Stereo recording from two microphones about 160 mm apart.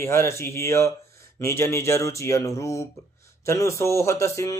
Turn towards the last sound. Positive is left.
turn(degrees=20)  # may be behind; listen again after turning